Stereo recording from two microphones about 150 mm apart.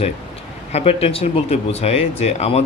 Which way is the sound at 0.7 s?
45° left (ahead or behind).